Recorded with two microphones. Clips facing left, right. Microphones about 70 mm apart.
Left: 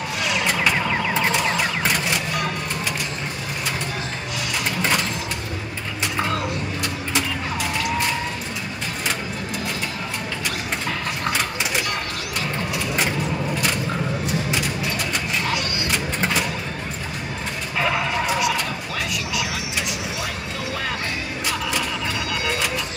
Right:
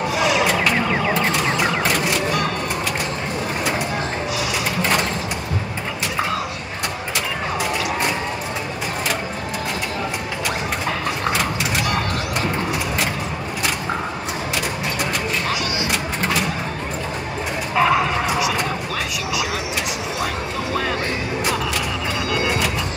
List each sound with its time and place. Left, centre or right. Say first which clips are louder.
0.3 s a sound: even; centre
1.1 s vehicle: right 1 dB; centre
17.7 s fowl: right 5 dB; centre